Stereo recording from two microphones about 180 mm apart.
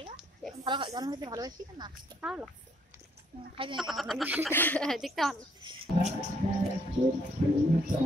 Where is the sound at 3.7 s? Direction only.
Centre (ahead or behind).